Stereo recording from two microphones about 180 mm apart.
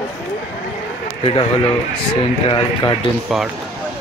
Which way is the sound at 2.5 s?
25° left (ahead or behind).